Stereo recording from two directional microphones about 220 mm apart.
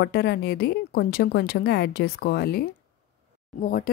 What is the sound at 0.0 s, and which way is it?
A woman's voice, 50° left (ahead or behind).